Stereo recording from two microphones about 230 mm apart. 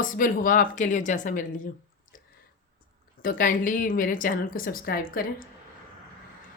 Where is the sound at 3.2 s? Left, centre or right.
Left.